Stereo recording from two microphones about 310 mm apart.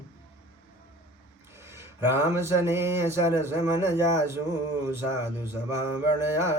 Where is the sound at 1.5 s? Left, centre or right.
Centre.